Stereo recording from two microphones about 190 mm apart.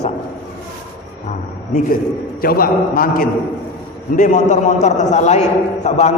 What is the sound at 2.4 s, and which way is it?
A man's voice, 50° left (ahead or behind).